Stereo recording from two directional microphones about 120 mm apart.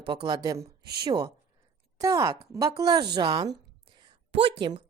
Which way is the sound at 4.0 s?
45° right (ahead or behind).